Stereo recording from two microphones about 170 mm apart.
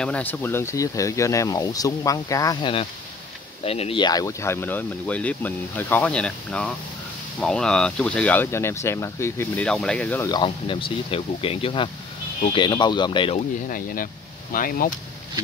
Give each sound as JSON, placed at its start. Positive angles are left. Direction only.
{"t": 0.0, "sound": "speech", "side_deg": 10}
{"t": 10.2, "sound": "speech", "side_deg": 25}
{"t": 13.7, "sound": "speech", "side_deg": 55}